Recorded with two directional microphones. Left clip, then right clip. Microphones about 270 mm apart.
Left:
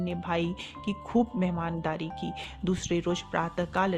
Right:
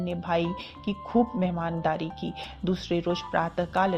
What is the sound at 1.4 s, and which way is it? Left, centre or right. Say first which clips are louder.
Speech: right 4 dB; left.